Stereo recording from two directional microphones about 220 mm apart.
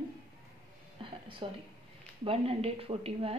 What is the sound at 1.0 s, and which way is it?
Speech, 25° right (ahead or behind).